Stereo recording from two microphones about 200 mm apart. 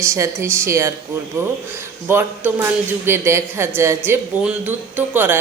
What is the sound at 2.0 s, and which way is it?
Speech, 10° right (ahead or behind).